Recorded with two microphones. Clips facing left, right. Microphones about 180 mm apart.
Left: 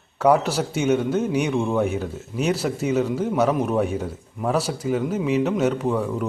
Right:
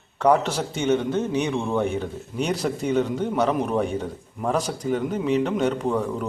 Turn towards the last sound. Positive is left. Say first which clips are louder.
# left 1 dB
turn(degrees=0)  # may be behind; listen again after turning